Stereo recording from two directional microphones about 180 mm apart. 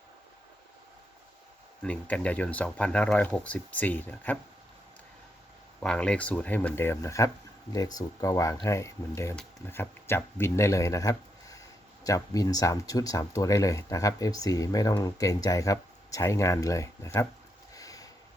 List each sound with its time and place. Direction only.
1.8 s speech: 5° left (ahead or behind)
5.8 s speech: 5° left (ahead or behind)
17.7 s a sound: 20° left (ahead or behind)